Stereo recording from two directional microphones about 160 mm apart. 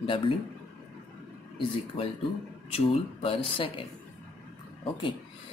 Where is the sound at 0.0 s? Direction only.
35° left (ahead or behind).